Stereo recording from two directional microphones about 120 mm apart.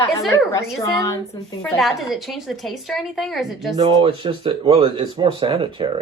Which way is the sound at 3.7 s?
40° right (ahead or behind).